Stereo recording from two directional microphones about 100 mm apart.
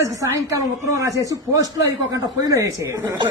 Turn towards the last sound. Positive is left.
turn(degrees=-30)  # may be behind; listen again after turning